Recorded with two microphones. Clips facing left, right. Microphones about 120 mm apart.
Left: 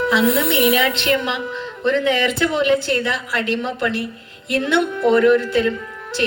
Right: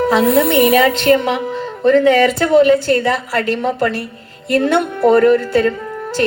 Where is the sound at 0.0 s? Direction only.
45° right (ahead or behind).